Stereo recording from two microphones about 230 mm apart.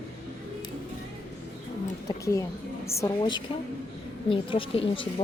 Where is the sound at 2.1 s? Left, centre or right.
Centre.